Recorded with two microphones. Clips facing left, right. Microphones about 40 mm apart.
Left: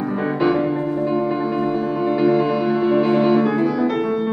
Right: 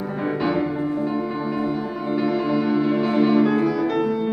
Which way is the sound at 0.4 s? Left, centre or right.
Centre.